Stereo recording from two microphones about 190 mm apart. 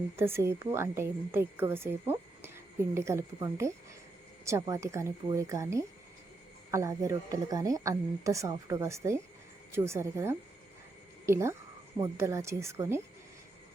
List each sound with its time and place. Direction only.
0.2 s speech: 15° right (ahead or behind)